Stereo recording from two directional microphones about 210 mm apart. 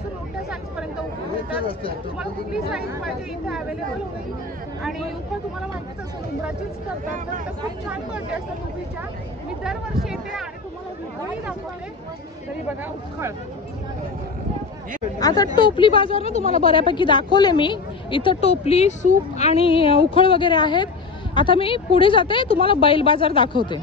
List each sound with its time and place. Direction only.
1.7 s speech: 25° left (ahead or behind)
2.1 s speech: 5° right (ahead or behind)
15.1 s speech: 15° left (ahead or behind)